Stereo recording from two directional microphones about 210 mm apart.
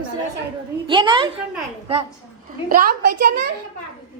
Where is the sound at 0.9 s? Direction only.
25° right (ahead or behind).